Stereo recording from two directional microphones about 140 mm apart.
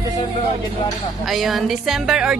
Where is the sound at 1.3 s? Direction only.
Centre (ahead or behind).